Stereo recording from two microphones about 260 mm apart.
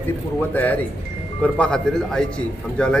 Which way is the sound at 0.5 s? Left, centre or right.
Centre.